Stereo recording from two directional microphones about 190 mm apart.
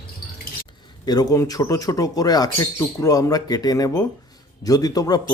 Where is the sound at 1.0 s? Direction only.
20° left (ahead or behind).